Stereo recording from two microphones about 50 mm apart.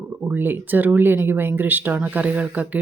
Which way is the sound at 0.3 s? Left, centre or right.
Right.